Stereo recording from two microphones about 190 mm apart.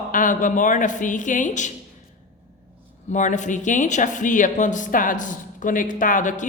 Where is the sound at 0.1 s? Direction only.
45° left (ahead or behind).